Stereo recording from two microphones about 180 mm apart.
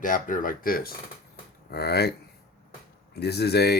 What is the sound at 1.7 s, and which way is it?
Speech, 65° left (ahead or behind).